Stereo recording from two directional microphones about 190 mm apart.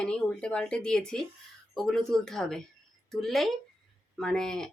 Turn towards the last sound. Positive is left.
turn(degrees=5)  # may be behind; listen again after turning